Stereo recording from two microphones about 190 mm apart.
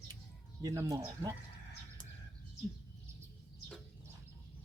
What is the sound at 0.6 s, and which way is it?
Speech, 15° right (ahead or behind).